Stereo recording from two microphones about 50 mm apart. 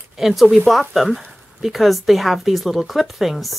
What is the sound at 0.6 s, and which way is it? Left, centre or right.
Speech, centre.